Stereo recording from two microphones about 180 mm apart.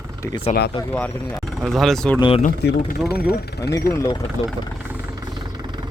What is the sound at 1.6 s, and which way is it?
Speech, centre (ahead or behind).